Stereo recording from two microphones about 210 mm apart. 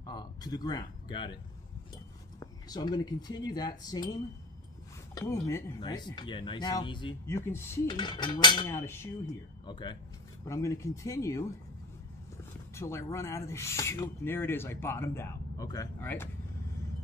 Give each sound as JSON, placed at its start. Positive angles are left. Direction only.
{"t": 0.0, "sound": "speech", "side_deg": 20}
{"t": 2.4, "sound": "speech", "side_deg": 20}
{"t": 7.3, "sound": "speech", "side_deg": 10}
{"t": 12.7, "sound": "speech", "side_deg": 15}